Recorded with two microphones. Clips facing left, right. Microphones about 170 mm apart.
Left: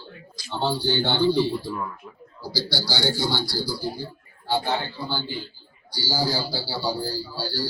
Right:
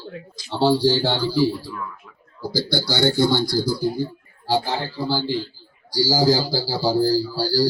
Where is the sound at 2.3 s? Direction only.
50° right (ahead or behind).